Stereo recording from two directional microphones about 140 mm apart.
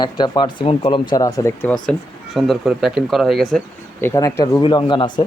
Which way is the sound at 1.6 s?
5° left (ahead or behind).